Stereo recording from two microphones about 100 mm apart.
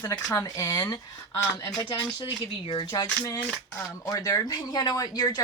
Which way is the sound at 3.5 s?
20° left (ahead or behind).